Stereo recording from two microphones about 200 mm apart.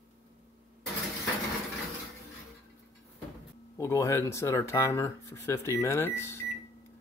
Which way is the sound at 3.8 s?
15° left (ahead or behind).